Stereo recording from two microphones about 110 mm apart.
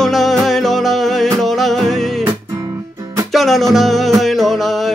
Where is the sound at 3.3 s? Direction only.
Centre (ahead or behind).